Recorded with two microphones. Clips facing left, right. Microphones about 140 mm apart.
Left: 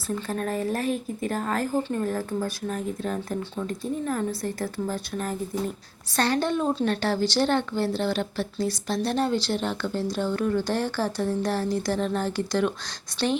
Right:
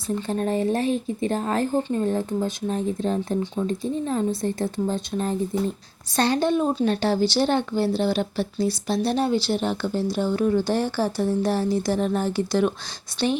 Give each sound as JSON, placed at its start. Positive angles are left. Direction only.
{"t": 0.3, "sound": "speech", "side_deg": -25}
{"t": 6.1, "sound": "speech", "side_deg": -15}